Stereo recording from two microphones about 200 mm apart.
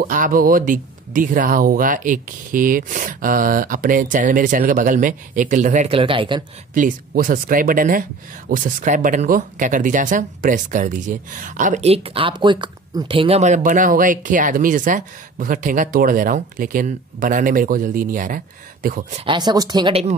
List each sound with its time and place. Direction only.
0.0 s speech: 45° right (ahead or behind); by 6.4 s 25° right (ahead or behind)
6.7 s speech: 45° right (ahead or behind)
19.2 s speech: 20° right (ahead or behind)